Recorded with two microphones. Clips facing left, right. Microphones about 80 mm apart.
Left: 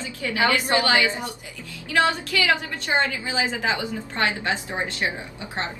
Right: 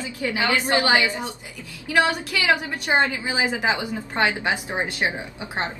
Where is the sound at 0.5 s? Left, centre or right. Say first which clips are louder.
Right 1 dB; right.